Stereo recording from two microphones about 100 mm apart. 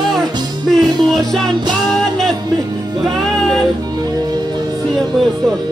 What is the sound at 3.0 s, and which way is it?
Music, 5° left (ahead or behind).